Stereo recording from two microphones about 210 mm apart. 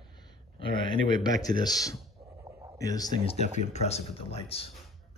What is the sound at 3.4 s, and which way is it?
Speech, 30° left (ahead or behind).